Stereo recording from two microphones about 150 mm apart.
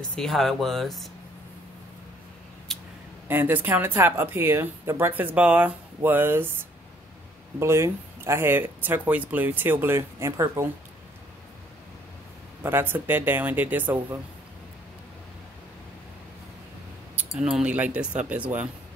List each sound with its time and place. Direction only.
0.0 s speech: 5° left (ahead or behind)
2.7 s a sound: centre (ahead or behind)
3.3 s speech: 15° right (ahead or behind)
7.5 s speech: 15° right (ahead or behind)
12.6 s speech: 15° right (ahead or behind)
17.2 s speech: 5° right (ahead or behind)